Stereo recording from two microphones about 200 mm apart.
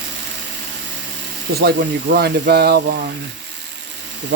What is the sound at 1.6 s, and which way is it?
Speech, 50° right (ahead or behind).